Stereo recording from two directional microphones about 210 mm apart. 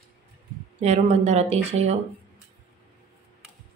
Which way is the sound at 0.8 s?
35° right (ahead or behind).